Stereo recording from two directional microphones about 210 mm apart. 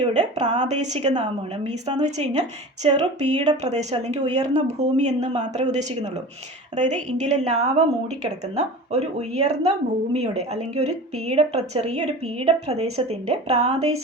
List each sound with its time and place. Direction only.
0.1 s a woman's voice: 35° right (ahead or behind)